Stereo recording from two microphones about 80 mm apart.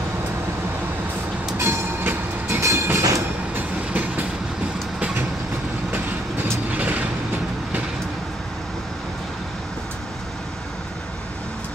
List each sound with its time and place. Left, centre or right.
1.6 s train: right
3.5 s train: centre
5.9 s train: right